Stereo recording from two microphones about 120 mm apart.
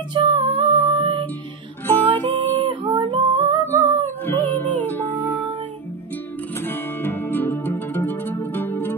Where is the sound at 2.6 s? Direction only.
45° right (ahead or behind).